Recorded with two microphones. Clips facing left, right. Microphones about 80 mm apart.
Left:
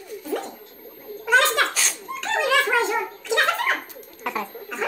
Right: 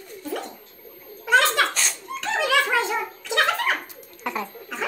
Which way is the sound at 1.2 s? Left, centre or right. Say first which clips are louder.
Even; centre.